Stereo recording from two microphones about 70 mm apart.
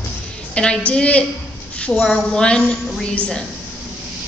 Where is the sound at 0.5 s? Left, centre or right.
Centre.